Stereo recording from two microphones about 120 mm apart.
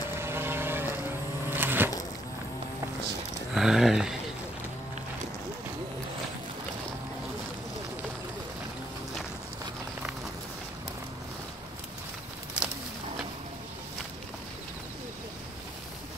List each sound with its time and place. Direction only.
0.2 s vehicle: 20° right (ahead or behind)
1.5 s a sound: 15° right (ahead or behind)
3.5 s speech: 5° right (ahead or behind)